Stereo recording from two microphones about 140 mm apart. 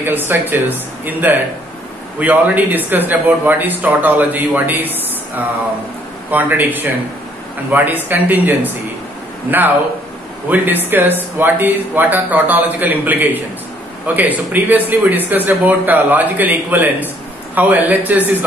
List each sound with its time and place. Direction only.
0.0 s speech: 15° right (ahead or behind)
6.3 s speech: 15° right (ahead or behind)
10.5 s speech: 15° right (ahead or behind)